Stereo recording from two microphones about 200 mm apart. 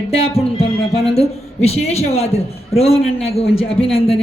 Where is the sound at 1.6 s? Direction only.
30° left (ahead or behind).